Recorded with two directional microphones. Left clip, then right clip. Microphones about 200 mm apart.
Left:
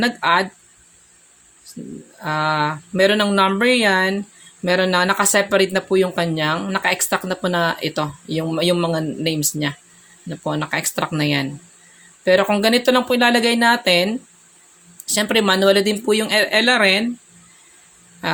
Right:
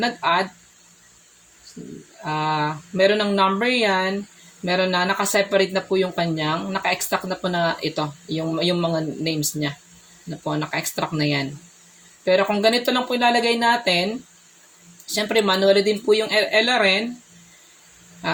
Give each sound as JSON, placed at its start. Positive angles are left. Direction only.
{"t": 0.0, "sound": "speech", "side_deg": 25}
{"t": 2.2, "sound": "speech", "side_deg": 30}